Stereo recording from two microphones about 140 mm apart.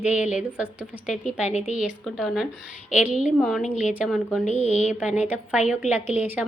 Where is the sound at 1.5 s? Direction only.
55° left (ahead or behind).